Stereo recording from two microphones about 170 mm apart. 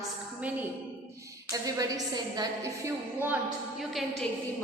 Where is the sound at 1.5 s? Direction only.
20° right (ahead or behind).